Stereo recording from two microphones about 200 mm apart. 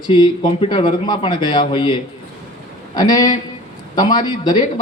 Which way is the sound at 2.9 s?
20° left (ahead or behind).